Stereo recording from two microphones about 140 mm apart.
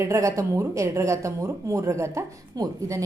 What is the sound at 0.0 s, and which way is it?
A woman's voice, 20° right (ahead or behind).